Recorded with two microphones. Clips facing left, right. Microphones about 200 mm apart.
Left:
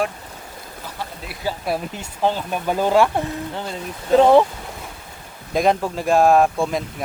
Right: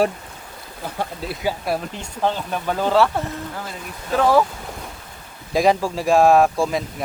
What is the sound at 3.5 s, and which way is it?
Speech, 25° left (ahead or behind).